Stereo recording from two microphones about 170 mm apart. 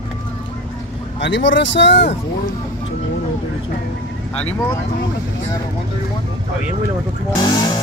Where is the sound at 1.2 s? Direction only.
90° left.